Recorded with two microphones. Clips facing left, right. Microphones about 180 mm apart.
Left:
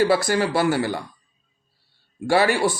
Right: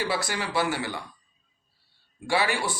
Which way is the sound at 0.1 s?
40° left (ahead or behind).